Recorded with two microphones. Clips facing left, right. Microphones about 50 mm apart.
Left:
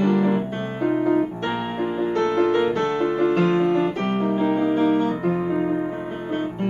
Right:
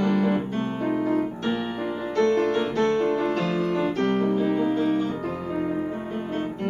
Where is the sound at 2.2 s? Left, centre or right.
Centre.